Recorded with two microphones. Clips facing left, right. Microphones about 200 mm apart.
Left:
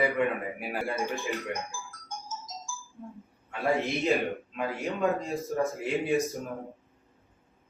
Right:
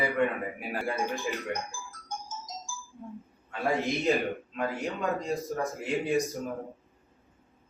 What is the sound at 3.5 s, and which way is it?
A man's voice, centre (ahead or behind).